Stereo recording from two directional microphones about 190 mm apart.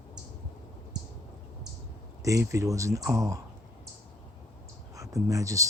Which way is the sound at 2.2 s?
15° right (ahead or behind).